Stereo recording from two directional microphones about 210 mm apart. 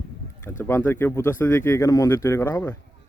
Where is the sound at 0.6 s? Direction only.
10° left (ahead or behind).